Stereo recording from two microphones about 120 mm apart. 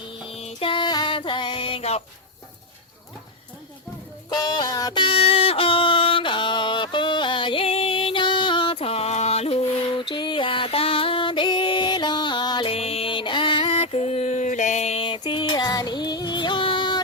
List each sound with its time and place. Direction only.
0.3 s music: 55° left (ahead or behind)
4.3 s music: 35° left (ahead or behind); by 9.6 s 60° left (ahead or behind)
9.9 s music: 40° left (ahead or behind)
12.6 s music: 55° left (ahead or behind)
13.7 s a sound: 55° left (ahead or behind)
15.0 s music: 45° left (ahead or behind)